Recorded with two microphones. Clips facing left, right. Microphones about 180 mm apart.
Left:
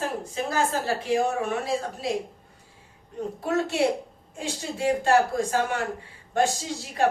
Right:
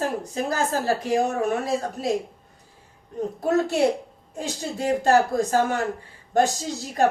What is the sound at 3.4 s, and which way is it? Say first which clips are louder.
A woman's voice: right 3 dB; 40° right (ahead or behind).